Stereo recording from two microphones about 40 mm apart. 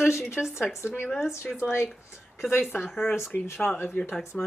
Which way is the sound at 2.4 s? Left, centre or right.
Left.